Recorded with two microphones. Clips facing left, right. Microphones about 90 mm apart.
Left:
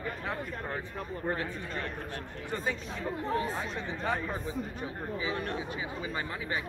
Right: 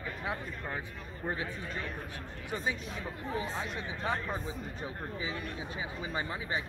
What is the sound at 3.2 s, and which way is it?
Speech, 70° left (ahead or behind).